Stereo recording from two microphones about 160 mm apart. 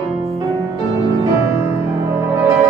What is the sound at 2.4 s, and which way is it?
Music, 20° right (ahead or behind).